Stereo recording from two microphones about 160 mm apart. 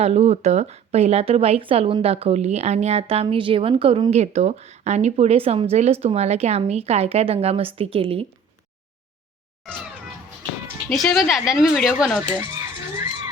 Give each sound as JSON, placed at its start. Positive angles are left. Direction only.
{"t": 0.0, "sound": "speech", "side_deg": -40}
{"t": 10.8, "sound": "a woman's voice", "side_deg": 0}